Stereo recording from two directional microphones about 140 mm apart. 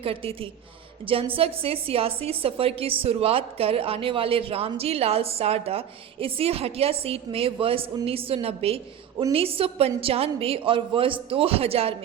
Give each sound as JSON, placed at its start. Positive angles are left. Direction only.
{"t": 0.0, "sound": "a woman's voice", "side_deg": -40}